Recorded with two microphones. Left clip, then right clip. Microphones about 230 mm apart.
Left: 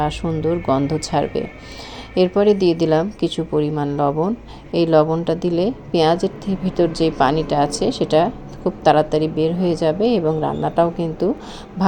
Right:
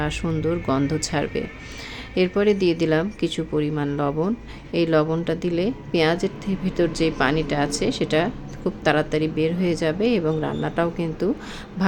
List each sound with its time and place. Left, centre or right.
0.0 s a woman's voice: centre